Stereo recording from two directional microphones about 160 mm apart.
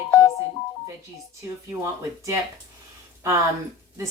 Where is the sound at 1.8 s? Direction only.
20° right (ahead or behind).